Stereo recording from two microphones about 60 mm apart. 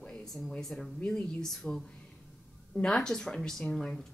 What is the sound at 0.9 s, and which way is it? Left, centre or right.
Speech, centre.